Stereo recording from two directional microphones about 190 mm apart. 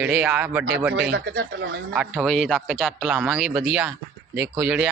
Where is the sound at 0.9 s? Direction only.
60° right (ahead or behind).